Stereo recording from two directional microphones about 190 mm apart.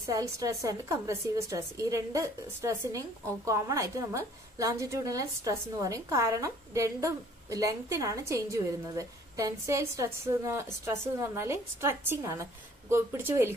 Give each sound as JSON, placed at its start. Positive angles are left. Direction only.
{"t": 0.1, "sound": "a woman's voice", "side_deg": -15}